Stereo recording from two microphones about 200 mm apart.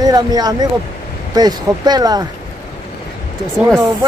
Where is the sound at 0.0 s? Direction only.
20° right (ahead or behind).